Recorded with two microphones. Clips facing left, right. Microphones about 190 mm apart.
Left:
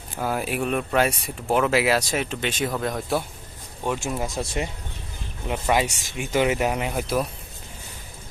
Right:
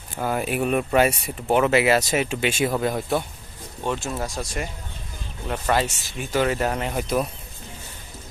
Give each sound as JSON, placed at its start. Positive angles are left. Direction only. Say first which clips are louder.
{"t": 0.2, "sound": "speech", "louder": "right 2 dB", "side_deg": 0}
{"t": 3.8, "sound": "speech", "louder": "even", "side_deg": 10}
{"t": 4.4, "sound": "speech", "louder": "left 2 dB", "side_deg": 25}
{"t": 5.5, "sound": "speech", "louder": "even", "side_deg": 10}